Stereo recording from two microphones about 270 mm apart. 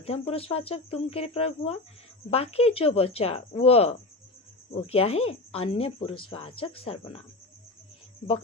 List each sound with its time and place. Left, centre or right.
0.0 s speech: left